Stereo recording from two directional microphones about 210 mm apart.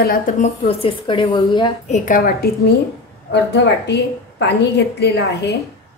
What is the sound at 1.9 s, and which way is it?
A woman's voice, 40° left (ahead or behind).